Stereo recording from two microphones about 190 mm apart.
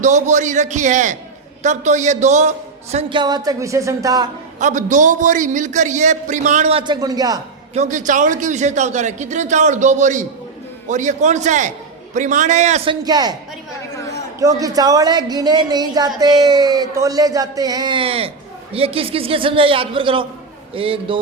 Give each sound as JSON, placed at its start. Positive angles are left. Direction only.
{"t": 0.0, "sound": "a man's voice", "side_deg": -40}
{"t": 4.6, "sound": "a man's voice", "side_deg": -40}
{"t": 7.7, "sound": "a man's voice", "side_deg": -40}
{"t": 14.3, "sound": "a woman's voice", "side_deg": -15}